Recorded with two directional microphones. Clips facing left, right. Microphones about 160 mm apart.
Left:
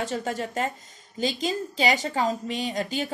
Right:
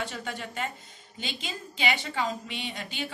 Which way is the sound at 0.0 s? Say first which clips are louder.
Left 7 dB; 40° left (ahead or behind).